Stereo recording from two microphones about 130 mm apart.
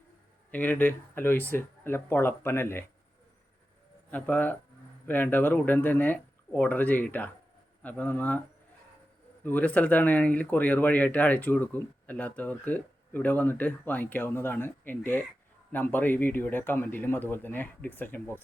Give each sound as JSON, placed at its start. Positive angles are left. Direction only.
{"t": 0.5, "sound": "speech", "side_deg": 15}
{"t": 4.1, "sound": "speech", "side_deg": 15}
{"t": 9.4, "sound": "speech", "side_deg": 10}